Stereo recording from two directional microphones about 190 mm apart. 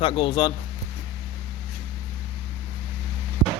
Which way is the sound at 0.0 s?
25° left (ahead or behind).